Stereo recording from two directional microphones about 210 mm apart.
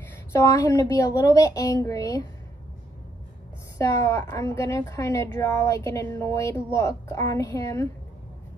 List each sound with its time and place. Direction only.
0.1 s a woman's voice: 15° left (ahead or behind)
3.7 s a woman's voice: 15° left (ahead or behind)